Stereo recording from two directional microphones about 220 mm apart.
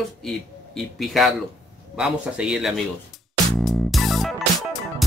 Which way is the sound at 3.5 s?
Centre (ahead or behind).